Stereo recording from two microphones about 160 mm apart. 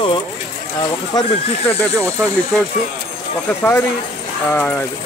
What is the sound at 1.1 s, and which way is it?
Speech, 25° left (ahead or behind).